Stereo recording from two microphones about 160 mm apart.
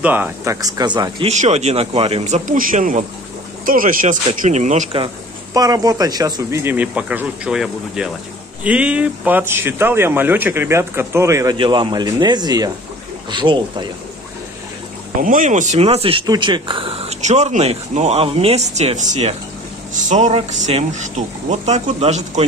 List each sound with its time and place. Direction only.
0.0 s speech: 10° right (ahead or behind)
0.6 s speech: 25° right (ahead or behind)
1.4 s speech: 45° right (ahead or behind)
4.4 s speech: 45° right (ahead or behind)
5.0 s speech: 25° right (ahead or behind)
11.5 s speech: 30° right (ahead or behind)
15.2 s speech: 50° right (ahead or behind)